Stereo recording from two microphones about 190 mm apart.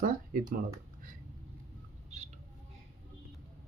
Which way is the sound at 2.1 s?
35° right (ahead or behind).